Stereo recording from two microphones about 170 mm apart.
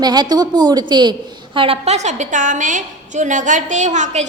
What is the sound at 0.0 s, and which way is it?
A woman's voice, 25° right (ahead or behind).